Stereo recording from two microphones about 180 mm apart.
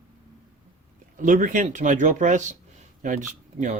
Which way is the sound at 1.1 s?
45° right (ahead or behind).